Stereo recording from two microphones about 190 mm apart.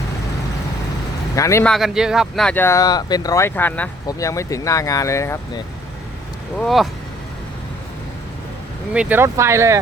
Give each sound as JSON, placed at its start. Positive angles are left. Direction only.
{"t": 1.4, "sound": "speech", "side_deg": 15}
{"t": 1.6, "sound": "speech", "side_deg": 0}
{"t": 6.6, "sound": "speech", "side_deg": 0}
{"t": 8.9, "sound": "speech", "side_deg": -5}